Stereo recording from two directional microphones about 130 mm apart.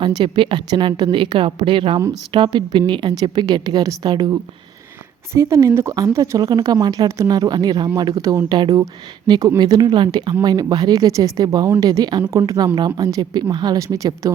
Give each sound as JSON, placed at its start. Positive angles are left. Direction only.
{"t": 0.0, "sound": "a woman's voice", "side_deg": -35}
{"t": 5.3, "sound": "a woman's voice", "side_deg": -20}